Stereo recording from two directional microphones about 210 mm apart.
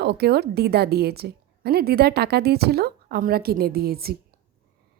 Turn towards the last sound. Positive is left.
turn(degrees=-45)  # may be behind; listen again after turning